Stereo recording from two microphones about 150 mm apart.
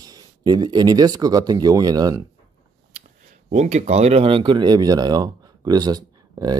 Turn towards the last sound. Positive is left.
turn(degrees=-25)  # may be behind; listen again after turning